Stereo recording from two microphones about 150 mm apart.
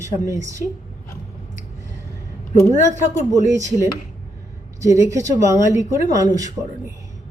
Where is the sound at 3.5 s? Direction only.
20° right (ahead or behind).